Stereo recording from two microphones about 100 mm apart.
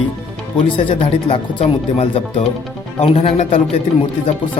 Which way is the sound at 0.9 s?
60° left (ahead or behind).